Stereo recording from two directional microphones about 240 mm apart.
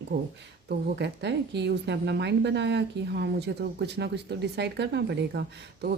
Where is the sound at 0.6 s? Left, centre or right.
Right.